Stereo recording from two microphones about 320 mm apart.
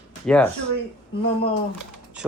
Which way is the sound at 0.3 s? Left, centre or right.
Centre.